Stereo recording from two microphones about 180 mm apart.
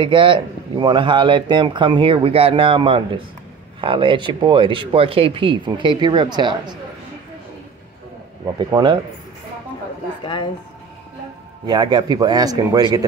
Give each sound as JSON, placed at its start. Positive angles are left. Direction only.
{"t": 0.0, "sound": "speech", "side_deg": -30}
{"t": 8.5, "sound": "speech", "side_deg": -20}
{"t": 10.2, "sound": "speech", "side_deg": 25}
{"t": 11.6, "sound": "speech", "side_deg": -25}